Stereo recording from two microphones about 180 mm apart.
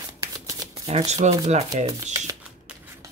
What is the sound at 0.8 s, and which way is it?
Speech, 35° right (ahead or behind).